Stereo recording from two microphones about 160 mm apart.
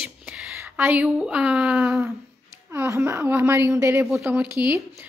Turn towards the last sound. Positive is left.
turn(degrees=-10)  # may be behind; listen again after turning